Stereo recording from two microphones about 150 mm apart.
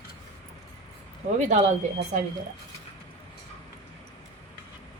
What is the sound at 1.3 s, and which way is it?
Speech, 50° right (ahead or behind).